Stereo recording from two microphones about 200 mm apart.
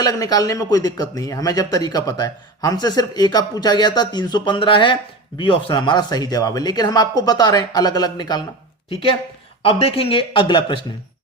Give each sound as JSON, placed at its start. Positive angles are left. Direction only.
{"t": 0.0, "sound": "speech", "side_deg": 20}